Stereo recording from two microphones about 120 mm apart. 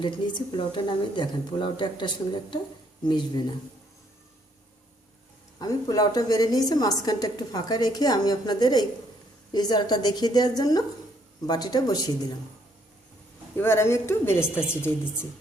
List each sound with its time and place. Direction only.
0.0 s a woman's voice: 40° left (ahead or behind)
5.5 s a woman's voice: 30° left (ahead or behind)
13.6 s speech: 20° left (ahead or behind)